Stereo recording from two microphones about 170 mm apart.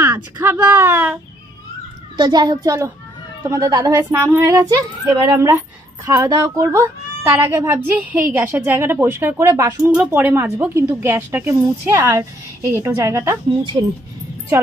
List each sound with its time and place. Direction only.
0.0 s a woman's voice: 15° right (ahead or behind)
2.1 s a child's voice: 25° right (ahead or behind)